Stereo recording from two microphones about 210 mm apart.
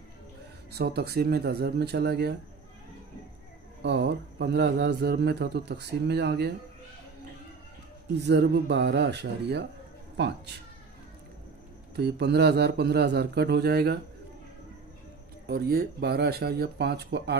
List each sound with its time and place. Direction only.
0.7 s speech: 50° right (ahead or behind)
3.8 s speech: 55° right (ahead or behind)
8.3 s speech: 55° right (ahead or behind)
11.9 s speech: 55° right (ahead or behind)
15.4 s speech: 45° right (ahead or behind)